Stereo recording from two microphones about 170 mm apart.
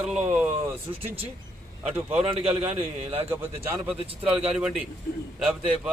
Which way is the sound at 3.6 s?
15° right (ahead or behind).